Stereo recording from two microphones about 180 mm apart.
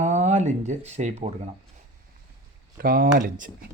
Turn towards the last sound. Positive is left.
turn(degrees=-50)  # may be behind; listen again after turning